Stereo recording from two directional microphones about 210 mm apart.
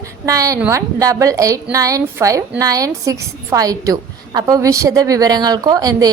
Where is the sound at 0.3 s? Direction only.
15° right (ahead or behind).